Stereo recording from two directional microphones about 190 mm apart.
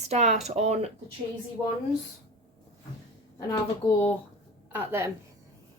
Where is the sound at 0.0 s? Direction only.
35° right (ahead or behind).